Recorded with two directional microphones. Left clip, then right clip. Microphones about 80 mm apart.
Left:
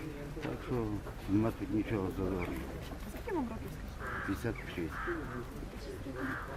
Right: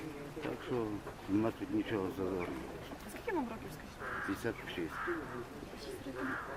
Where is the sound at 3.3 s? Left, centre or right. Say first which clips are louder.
Even; right.